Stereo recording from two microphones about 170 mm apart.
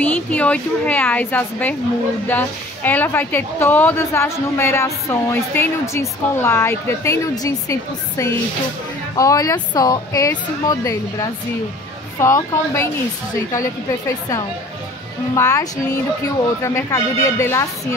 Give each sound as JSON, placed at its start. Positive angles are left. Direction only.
{"t": 0.0, "sound": "speech", "side_deg": 10}
{"t": 16.6, "sound": "speech", "side_deg": 15}